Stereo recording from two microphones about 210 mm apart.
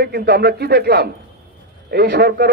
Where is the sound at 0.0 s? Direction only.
45° right (ahead or behind).